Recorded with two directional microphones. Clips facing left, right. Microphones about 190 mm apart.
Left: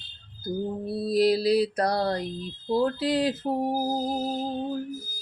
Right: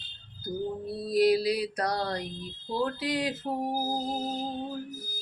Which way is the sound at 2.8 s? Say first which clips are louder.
Left 3 dB; 35° left (ahead or behind).